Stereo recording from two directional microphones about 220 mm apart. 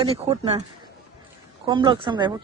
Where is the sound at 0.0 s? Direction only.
25° right (ahead or behind).